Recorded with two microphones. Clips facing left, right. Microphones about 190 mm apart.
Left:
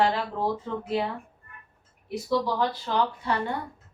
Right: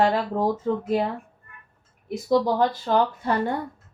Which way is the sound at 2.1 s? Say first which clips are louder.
Right 5 dB; 45° right (ahead or behind).